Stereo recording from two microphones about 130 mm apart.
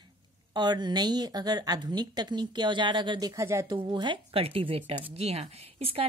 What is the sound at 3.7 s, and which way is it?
Speech, 35° right (ahead or behind).